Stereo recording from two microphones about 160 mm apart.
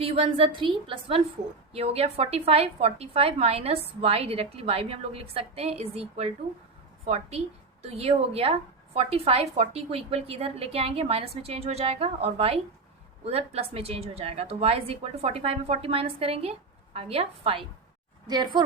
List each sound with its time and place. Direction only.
0.0 s a woman's voice: 35° right (ahead or behind)
18.3 s a woman's voice: 25° right (ahead or behind)